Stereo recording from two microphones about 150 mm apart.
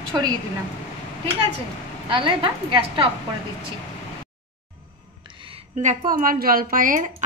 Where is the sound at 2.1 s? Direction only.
35° right (ahead or behind).